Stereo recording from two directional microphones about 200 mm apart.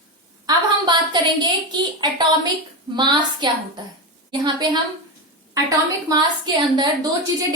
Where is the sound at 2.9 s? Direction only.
20° right (ahead or behind).